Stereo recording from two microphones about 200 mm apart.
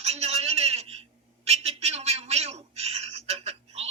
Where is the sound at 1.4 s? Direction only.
30° right (ahead or behind).